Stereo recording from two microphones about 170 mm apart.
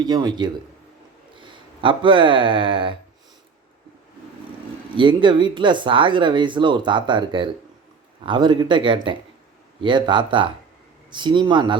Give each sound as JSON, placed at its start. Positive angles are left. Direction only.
{"t": 0.0, "sound": "speech", "side_deg": -25}
{"t": 4.9, "sound": "speech", "side_deg": -30}